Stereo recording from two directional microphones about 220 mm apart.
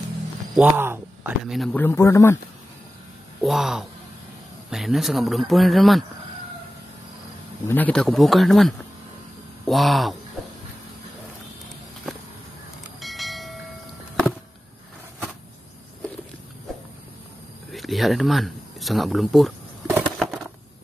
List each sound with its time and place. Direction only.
0.6 s speech: 10° right (ahead or behind); by 2.3 s 15° left (ahead or behind)
3.4 s speech: centre (ahead or behind)
7.6 s speech: 10° left (ahead or behind)
13.0 s train: centre (ahead or behind)
17.6 s a sound: centre (ahead or behind)